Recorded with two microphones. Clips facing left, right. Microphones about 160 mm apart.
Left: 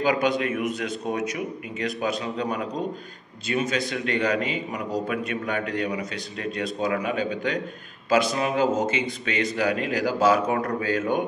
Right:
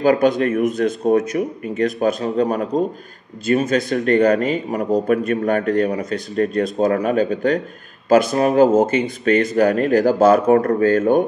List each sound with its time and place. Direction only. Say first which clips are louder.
0.0 s a man's voice: right 8 dB; 45° right (ahead or behind)